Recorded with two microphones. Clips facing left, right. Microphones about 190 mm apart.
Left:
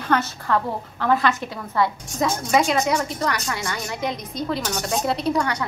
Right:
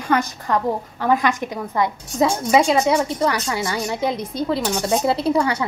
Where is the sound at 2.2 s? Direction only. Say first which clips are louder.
Right 4 dB; 25° right (ahead or behind).